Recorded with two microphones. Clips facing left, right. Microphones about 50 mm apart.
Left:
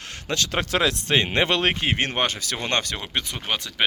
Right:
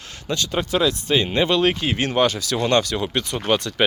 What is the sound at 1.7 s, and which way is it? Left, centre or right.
Speech, left.